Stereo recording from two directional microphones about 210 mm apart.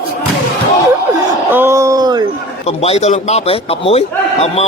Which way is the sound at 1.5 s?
10° right (ahead or behind).